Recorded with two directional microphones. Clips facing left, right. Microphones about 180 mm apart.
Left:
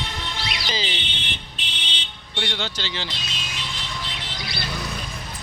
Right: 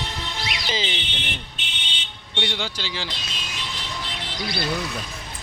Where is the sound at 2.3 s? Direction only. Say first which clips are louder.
Right 1 dB; 15° right (ahead or behind).